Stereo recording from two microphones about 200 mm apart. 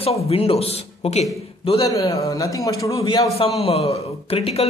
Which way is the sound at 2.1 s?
15° left (ahead or behind).